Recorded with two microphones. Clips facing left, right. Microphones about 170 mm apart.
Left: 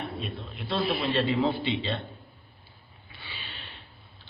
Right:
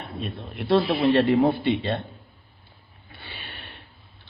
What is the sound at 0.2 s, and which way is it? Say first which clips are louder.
A man's voice: right 4 dB; 60° right (ahead or behind).